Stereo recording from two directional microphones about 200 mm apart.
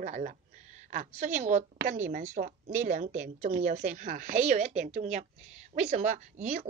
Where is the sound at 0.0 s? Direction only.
35° right (ahead or behind).